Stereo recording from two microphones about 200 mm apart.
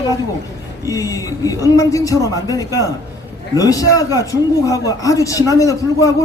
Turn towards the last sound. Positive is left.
turn(degrees=15)  # may be behind; listen again after turning